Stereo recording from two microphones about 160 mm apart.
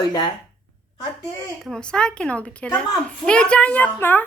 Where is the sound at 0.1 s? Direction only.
30° left (ahead or behind).